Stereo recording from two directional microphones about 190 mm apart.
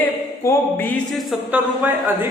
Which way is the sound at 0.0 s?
10° left (ahead or behind).